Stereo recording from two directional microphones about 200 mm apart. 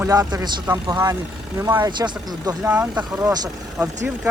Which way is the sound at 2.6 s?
10° right (ahead or behind).